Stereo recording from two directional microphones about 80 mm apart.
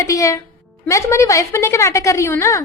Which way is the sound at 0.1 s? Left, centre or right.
Left.